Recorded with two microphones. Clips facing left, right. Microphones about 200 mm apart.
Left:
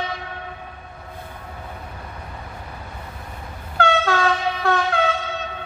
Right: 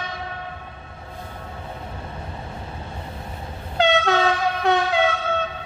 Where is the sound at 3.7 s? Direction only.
20° right (ahead or behind).